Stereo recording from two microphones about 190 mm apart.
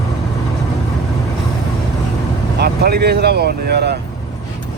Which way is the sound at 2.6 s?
55° right (ahead or behind).